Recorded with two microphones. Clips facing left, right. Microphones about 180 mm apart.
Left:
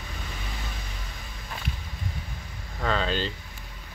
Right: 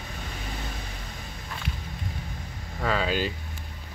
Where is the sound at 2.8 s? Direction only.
5° right (ahead or behind).